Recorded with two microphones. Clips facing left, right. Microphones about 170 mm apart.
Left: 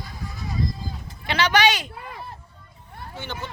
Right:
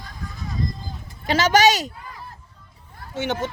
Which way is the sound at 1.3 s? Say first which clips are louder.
Right 4 dB; 40° right (ahead or behind).